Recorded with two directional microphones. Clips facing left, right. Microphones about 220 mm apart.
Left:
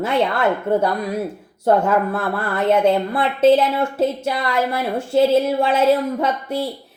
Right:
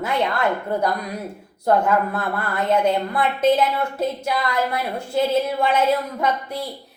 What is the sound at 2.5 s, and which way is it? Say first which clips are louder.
A woman's voice: left 4 dB; 25° left (ahead or behind).